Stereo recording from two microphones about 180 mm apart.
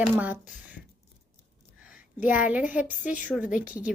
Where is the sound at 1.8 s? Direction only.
5° right (ahead or behind).